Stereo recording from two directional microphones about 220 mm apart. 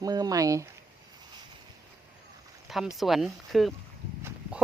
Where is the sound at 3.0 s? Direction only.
Centre (ahead or behind).